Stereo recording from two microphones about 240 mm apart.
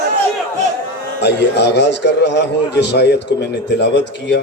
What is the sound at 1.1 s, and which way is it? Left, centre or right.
A man's voice, left.